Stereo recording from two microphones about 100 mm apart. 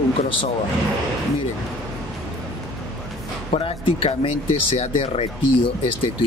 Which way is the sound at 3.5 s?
65° left (ahead or behind).